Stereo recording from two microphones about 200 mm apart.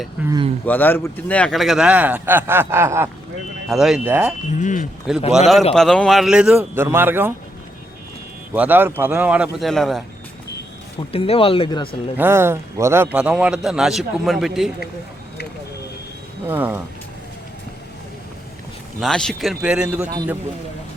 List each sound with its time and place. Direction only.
0.3 s speech: 25° right (ahead or behind)
0.6 s a man's voice: 10° left (ahead or behind); by 3.1 s 15° right (ahead or behind)
3.7 s a man's voice: centre (ahead or behind)
4.5 s speech: 40° left (ahead or behind)
5.1 s a man's voice: centre (ahead or behind)
8.5 s a man's voice: 10° right (ahead or behind)
11.1 s speech: 30° left (ahead or behind)
12.1 s a man's voice: 10° right (ahead or behind)
16.5 s speech: 10° right (ahead or behind)
18.9 s a man's voice: centre (ahead or behind)